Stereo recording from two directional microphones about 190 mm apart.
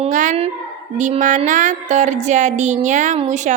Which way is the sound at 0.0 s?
40° right (ahead or behind).